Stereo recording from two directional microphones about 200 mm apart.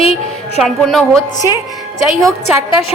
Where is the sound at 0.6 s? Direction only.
Centre (ahead or behind).